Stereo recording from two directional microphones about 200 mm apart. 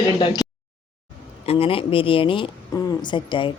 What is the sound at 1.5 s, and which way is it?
Speech, 30° left (ahead or behind).